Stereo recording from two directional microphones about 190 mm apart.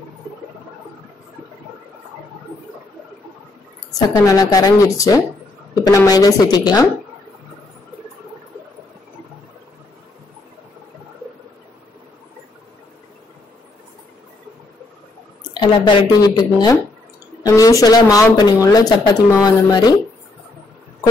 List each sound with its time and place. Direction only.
4.3 s speech: 20° left (ahead or behind)
15.5 s speech: 25° left (ahead or behind)